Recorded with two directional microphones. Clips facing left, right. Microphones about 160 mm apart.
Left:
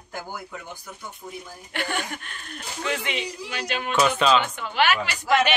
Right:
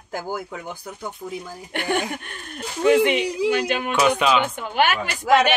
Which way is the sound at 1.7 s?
50° right (ahead or behind).